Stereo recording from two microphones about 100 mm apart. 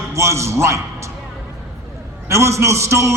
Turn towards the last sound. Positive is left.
turn(degrees=-30)  # may be behind; listen again after turning